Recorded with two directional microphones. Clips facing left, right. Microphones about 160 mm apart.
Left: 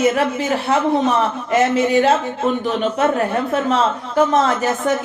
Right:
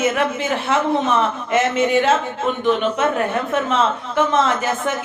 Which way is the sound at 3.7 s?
40° left (ahead or behind).